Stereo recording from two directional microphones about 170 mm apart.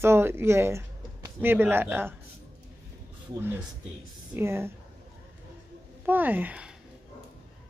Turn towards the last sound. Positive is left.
turn(degrees=-10)  # may be behind; listen again after turning